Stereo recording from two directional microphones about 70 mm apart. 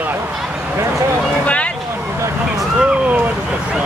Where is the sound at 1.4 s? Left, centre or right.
Centre.